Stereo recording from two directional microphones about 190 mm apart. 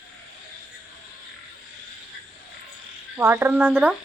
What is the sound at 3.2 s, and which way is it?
Speech, 15° right (ahead or behind).